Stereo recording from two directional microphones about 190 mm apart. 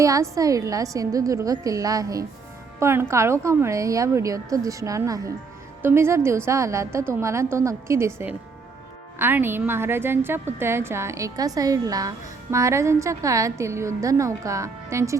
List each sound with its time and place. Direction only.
0.0 s a woman's voice: 15° right (ahead or behind)